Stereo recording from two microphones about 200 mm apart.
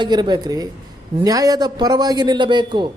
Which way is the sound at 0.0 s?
20° right (ahead or behind).